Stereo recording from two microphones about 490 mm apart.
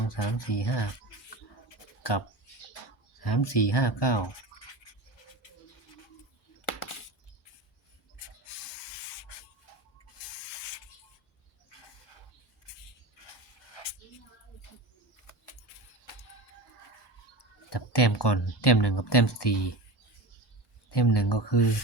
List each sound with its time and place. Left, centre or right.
0.0 s speech: left
1.7 s a sound: left
3.2 s speech: left
11.7 s a sound: left
17.3 s speech: left
20.9 s speech: left